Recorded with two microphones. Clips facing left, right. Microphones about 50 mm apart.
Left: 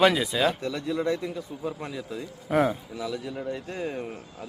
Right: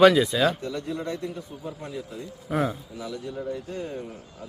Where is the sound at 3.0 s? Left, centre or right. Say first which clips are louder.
Left 2 dB; left.